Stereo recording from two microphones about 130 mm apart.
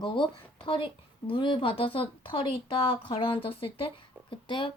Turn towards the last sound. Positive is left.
turn(degrees=40)  # may be behind; listen again after turning